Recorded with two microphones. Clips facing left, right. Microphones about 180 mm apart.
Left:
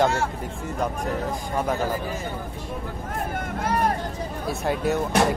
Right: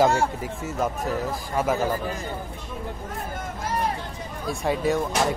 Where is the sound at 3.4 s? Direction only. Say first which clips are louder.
Left 3 dB; 60° left (ahead or behind).